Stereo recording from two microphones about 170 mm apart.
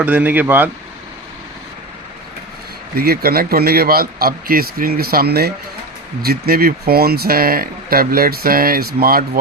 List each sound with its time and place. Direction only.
0.0 s speech: 10° right (ahead or behind)
2.9 s speech: 65° right (ahead or behind)